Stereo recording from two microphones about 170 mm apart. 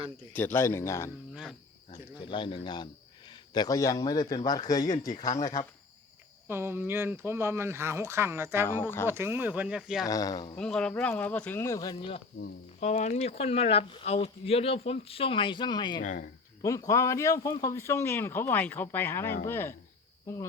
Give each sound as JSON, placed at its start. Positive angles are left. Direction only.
{"t": 0.3, "sound": "speech", "side_deg": 10}
{"t": 1.3, "sound": "cricket", "side_deg": -5}
{"t": 1.9, "sound": "speech", "side_deg": 30}
{"t": 6.5, "sound": "speech", "side_deg": -15}
{"t": 10.1, "sound": "speech", "side_deg": 20}
{"t": 10.6, "sound": "speech", "side_deg": 5}
{"t": 12.8, "sound": "speech", "side_deg": 40}
{"t": 16.0, "sound": "speech", "side_deg": 55}
{"t": 16.6, "sound": "speech", "side_deg": 20}